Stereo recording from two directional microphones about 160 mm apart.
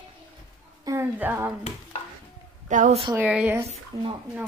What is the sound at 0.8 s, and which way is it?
Speech, 15° right (ahead or behind).